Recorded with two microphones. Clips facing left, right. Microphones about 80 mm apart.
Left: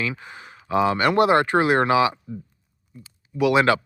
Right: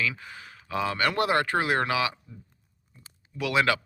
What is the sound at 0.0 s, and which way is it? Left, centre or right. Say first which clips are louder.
Speech: left 2 dB; left.